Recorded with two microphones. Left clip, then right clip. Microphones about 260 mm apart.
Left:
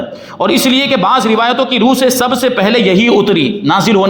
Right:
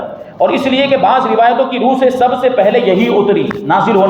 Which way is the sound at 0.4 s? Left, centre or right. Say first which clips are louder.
Even; left.